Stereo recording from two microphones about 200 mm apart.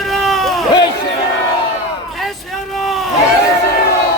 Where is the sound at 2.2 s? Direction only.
Centre (ahead or behind).